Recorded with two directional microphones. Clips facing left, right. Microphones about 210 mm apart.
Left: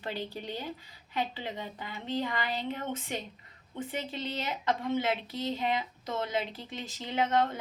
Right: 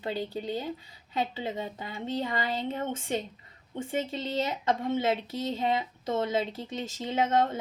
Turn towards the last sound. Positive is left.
turn(degrees=-25)  # may be behind; listen again after turning